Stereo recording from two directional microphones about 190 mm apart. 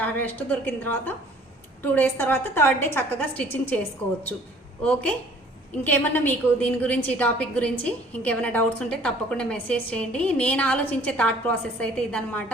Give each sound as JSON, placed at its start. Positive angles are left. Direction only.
{"t": 0.0, "sound": "a woman's voice", "side_deg": 10}
{"t": 4.8, "sound": "a woman's voice", "side_deg": 5}